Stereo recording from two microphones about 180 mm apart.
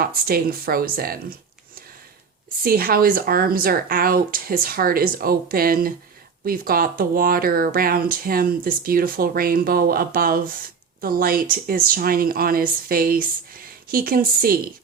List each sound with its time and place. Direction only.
0.0 s speech: 55° right (ahead or behind)
2.6 s speech: 55° right (ahead or behind)